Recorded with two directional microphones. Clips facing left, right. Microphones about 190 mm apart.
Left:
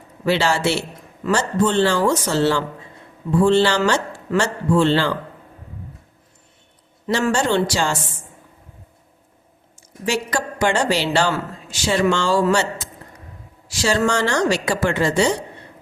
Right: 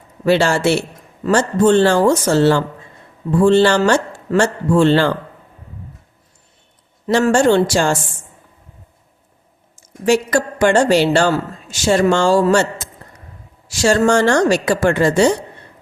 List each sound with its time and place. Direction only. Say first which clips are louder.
0.3 s a man's voice: right 5 dB; 50° right (ahead or behind)
7.1 s a man's voice: right 6 dB; 50° right (ahead or behind)
10.1 s a man's voice: right 7 dB; 50° right (ahead or behind)